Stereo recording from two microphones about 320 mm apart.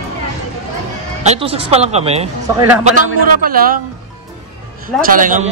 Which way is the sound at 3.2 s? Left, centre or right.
Right.